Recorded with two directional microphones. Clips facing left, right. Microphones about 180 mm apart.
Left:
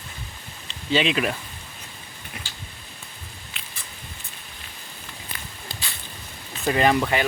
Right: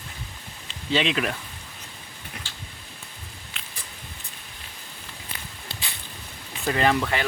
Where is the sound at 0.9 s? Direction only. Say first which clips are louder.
Left 2 dB; 5° left (ahead or behind).